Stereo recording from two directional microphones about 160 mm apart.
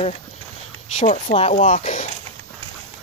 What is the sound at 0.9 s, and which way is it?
Speech, 45° left (ahead or behind).